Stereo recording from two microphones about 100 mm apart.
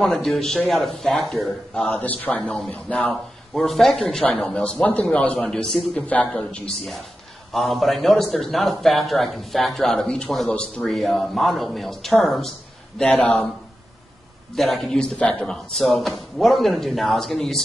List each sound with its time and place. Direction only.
0.0 s a man's voice: 5° left (ahead or behind)
1.9 s a man's voice: 15° left (ahead or behind)
3.5 s a man's voice: centre (ahead or behind)
6.8 s a man's voice: centre (ahead or behind)
13.1 s a man's voice: 15° left (ahead or behind)
14.5 s a man's voice: centre (ahead or behind)
15.7 s a man's voice: centre (ahead or behind)